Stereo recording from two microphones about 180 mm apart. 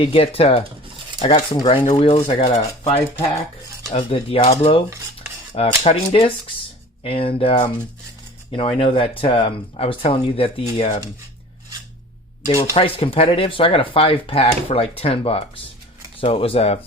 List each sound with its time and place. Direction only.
0.0 s speech: 30° left (ahead or behind)
3.9 s speech: 35° left (ahead or behind)
12.7 s speech: 30° left (ahead or behind)